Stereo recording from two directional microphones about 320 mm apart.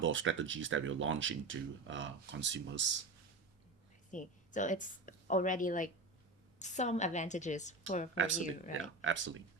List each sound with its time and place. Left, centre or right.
0.0 s speech: right
4.1 s a woman's voice: left
8.1 s speech: right